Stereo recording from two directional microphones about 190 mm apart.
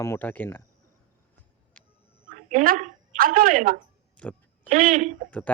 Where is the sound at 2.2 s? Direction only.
45° right (ahead or behind).